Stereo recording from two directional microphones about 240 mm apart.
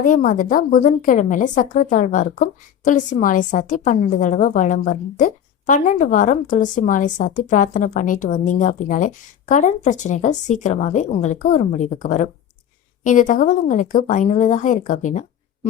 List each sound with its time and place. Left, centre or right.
0.0 s a woman's voice: left